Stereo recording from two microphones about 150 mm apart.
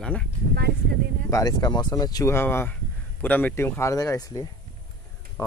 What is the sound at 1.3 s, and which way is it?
Speech, 25° left (ahead or behind).